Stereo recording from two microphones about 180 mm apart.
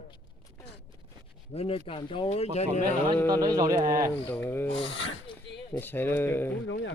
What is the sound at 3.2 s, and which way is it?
Speech, 20° right (ahead or behind).